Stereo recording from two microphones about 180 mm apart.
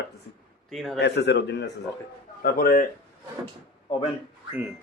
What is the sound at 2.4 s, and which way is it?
Speech, 55° left (ahead or behind).